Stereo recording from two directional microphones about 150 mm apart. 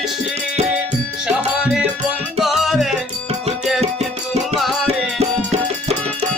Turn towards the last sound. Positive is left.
turn(degrees=0)  # may be behind; listen again after turning